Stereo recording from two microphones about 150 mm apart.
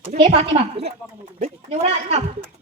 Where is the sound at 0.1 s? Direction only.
40° right (ahead or behind).